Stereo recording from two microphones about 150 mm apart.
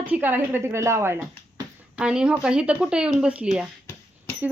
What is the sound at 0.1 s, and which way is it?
Speech, 15° right (ahead or behind).